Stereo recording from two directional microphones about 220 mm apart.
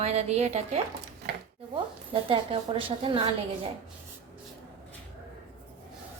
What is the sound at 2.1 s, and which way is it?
A woman's voice, 25° right (ahead or behind).